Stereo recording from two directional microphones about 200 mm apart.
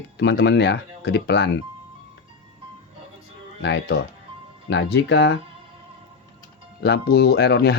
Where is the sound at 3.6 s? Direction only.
55° left (ahead or behind).